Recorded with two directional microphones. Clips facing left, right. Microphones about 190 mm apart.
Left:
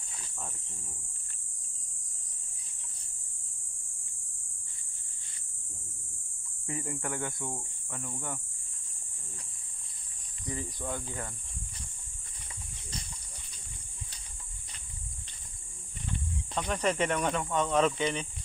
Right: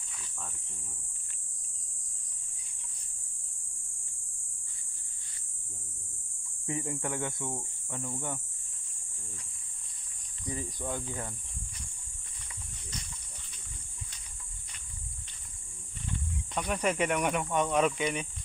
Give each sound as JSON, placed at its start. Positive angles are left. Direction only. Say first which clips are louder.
{"t": 6.8, "sound": "speech", "louder": "even", "side_deg": -10}
{"t": 10.4, "sound": "speech", "louder": "even", "side_deg": -15}
{"t": 16.5, "sound": "speech", "louder": "even", "side_deg": -10}